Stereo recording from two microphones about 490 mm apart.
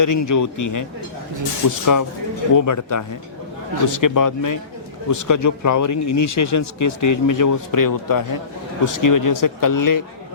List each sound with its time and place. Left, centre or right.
0.0 s a man's voice: left